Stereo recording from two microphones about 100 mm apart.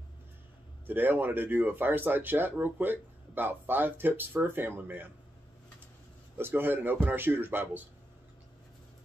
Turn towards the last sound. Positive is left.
turn(degrees=-20)  # may be behind; listen again after turning